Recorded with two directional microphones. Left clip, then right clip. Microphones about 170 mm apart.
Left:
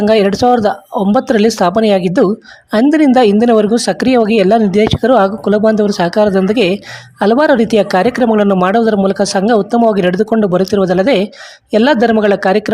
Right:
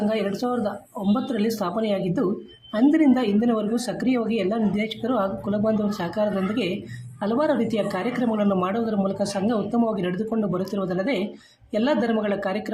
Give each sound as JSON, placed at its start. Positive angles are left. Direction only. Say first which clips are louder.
{"t": 0.1, "sound": "speech", "louder": "left 16 dB", "side_deg": 60}